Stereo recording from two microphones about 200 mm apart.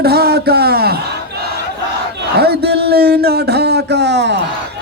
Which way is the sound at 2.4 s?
55° right (ahead or behind).